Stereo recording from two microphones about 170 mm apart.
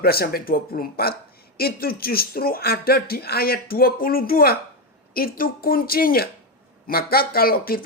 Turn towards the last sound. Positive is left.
turn(degrees=60)  # may be behind; listen again after turning